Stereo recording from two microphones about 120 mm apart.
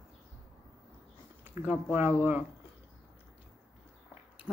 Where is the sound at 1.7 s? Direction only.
15° right (ahead or behind).